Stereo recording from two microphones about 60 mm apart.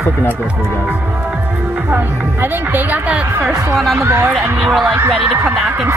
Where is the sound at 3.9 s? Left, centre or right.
Right.